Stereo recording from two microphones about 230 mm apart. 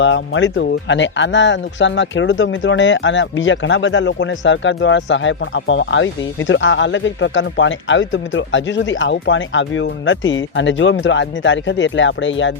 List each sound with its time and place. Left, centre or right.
0.0 s speech: left